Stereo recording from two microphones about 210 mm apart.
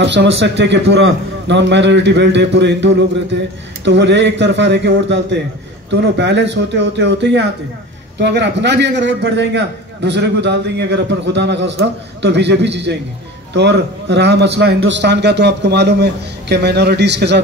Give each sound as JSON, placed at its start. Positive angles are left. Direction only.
{"t": 0.0, "sound": "a man's voice", "side_deg": -55}